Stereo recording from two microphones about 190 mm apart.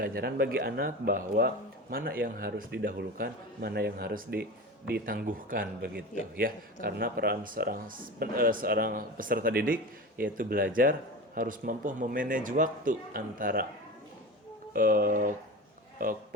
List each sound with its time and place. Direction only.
0.0 s speech: 50° right (ahead or behind)
14.7 s speech: 50° right (ahead or behind)